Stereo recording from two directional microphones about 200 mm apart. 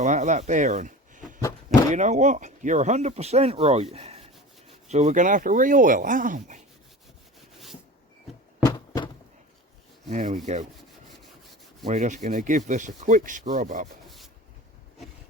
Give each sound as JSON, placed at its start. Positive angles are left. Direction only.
{"t": 0.0, "sound": "speech", "side_deg": -35}
{"t": 8.6, "sound": "a sound", "side_deg": 20}
{"t": 10.1, "sound": "speech", "side_deg": -35}
{"t": 11.9, "sound": "speech", "side_deg": -35}